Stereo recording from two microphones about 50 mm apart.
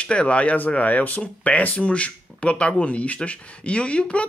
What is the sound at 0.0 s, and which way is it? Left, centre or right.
Speech, left.